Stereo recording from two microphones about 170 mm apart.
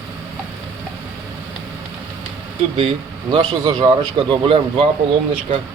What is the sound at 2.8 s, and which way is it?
Speech, 30° right (ahead or behind).